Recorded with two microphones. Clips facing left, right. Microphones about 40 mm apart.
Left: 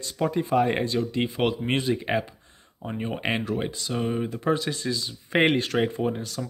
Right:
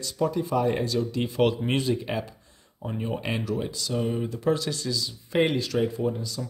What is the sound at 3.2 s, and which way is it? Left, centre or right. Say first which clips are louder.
Speech: left 5 dB; left.